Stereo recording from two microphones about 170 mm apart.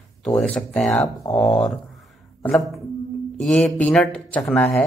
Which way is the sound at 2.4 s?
5° left (ahead or behind).